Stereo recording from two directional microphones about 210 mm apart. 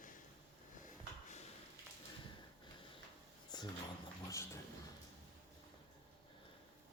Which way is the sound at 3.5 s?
20° left (ahead or behind).